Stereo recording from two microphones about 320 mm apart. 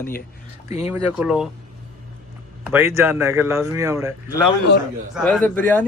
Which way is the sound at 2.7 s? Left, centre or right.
Centre.